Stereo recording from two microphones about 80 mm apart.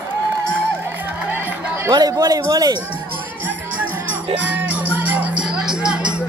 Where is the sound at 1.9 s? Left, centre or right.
Right.